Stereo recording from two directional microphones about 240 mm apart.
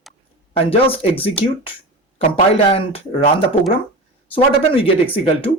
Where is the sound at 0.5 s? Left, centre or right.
Left.